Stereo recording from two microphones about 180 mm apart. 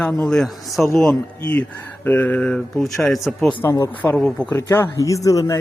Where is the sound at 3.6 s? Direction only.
15° left (ahead or behind).